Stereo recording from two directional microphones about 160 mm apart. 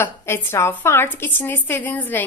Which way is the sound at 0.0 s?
15° left (ahead or behind).